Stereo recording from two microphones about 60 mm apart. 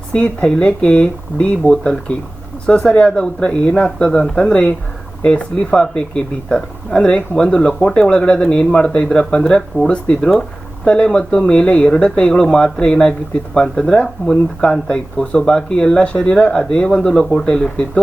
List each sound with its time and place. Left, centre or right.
0.1 s speech: centre